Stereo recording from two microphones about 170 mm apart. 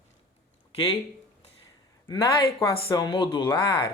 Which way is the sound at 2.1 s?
20° left (ahead or behind).